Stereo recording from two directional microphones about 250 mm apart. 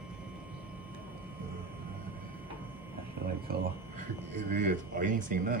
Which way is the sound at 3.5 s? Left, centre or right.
Right.